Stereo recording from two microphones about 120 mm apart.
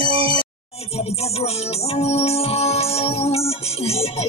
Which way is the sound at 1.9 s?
60° left (ahead or behind).